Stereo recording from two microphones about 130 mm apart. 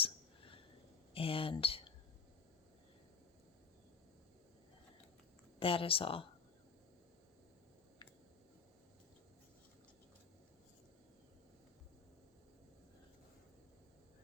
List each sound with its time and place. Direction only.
0.0 s whispering: 45° left (ahead or behind)
1.1 s speech: 45° left (ahead or behind)
5.5 s speech: 45° left (ahead or behind)